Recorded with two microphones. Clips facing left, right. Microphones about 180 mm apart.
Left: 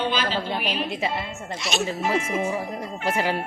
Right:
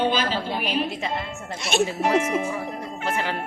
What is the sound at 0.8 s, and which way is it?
Speech, centre (ahead or behind).